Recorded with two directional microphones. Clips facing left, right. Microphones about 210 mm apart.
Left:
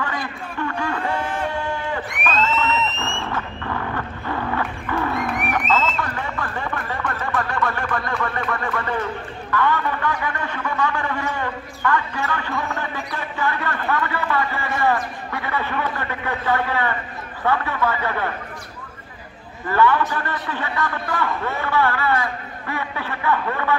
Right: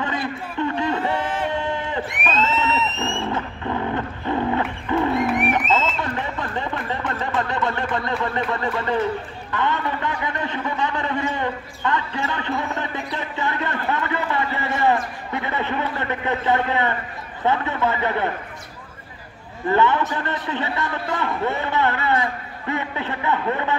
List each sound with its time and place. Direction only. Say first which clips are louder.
0.0 s a sound: right 2 dB; 20° right (ahead or behind)
3.2 s wild animals: right 2 dB; 20° right (ahead or behind)
5.2 s crowd: right 4 dB; centre (ahead or behind)
5.7 s a sound: even; 20° right (ahead or behind)
9.5 s a man's voice: left 2 dB; 20° right (ahead or behind)
19.7 s a man's voice: left 1 dB; 20° right (ahead or behind)